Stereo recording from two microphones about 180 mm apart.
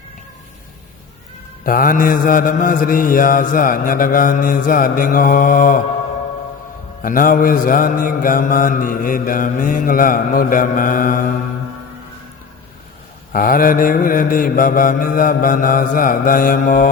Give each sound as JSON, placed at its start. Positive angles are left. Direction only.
{"t": 1.6, "sound": "mantra", "side_deg": 50}
{"t": 7.0, "sound": "mantra", "side_deg": 50}
{"t": 13.3, "sound": "mantra", "side_deg": 50}